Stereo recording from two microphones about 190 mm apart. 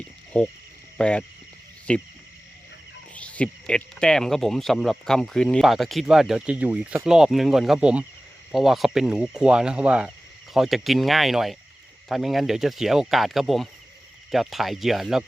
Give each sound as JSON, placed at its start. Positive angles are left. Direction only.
{"t": 0.9, "sound": "speech", "side_deg": 5}
{"t": 3.2, "sound": "speech", "side_deg": 5}